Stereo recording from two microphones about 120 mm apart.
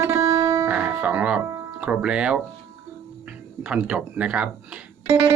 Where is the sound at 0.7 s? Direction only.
10° right (ahead or behind).